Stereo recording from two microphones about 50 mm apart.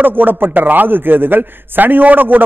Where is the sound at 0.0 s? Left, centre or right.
Right.